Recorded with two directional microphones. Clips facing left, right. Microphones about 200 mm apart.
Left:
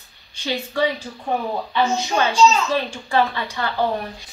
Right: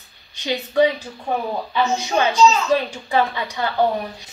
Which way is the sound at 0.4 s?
15° right (ahead or behind).